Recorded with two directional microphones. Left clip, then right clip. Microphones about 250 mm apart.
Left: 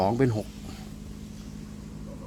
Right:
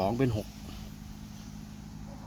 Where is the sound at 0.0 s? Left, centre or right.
Centre.